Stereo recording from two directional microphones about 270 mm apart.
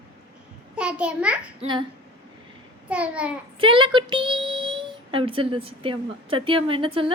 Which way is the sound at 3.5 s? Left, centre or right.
Centre.